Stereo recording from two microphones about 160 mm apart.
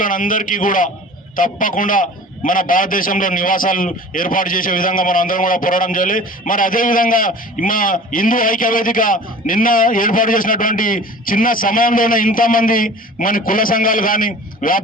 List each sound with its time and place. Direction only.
0.0 s a man's voice: 55° left (ahead or behind)